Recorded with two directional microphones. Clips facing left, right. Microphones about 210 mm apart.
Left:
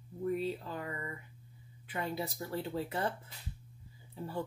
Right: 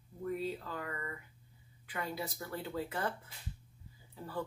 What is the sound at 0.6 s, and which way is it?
Speech, 20° left (ahead or behind).